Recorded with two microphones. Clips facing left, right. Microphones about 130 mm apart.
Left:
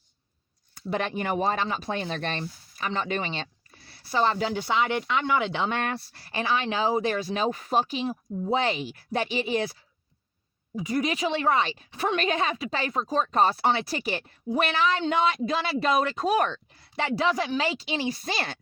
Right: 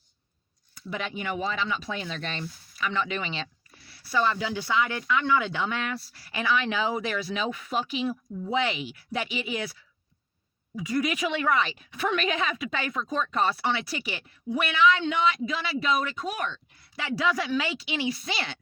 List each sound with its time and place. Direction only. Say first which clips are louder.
0.9 s speech: left 5 dB; 50° left (ahead or behind); by 4.5 s 35° left (ahead or behind)
4.6 s speech: even; 25° left (ahead or behind)
5.7 s speech: left 3 dB; 50° left (ahead or behind); by 9.7 s 35° left (ahead or behind)
10.8 s speech: left 1 dB; 25° left (ahead or behind)
17.2 s speech: right 1 dB; 30° left (ahead or behind)